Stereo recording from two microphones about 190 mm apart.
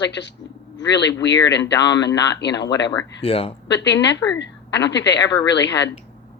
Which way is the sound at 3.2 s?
30° left (ahead or behind).